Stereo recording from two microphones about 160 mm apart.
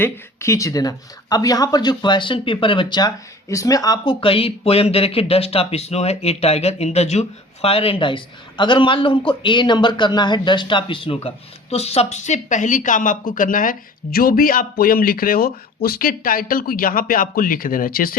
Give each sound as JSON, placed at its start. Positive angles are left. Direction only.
{"t": 0.0, "sound": "speech", "side_deg": 15}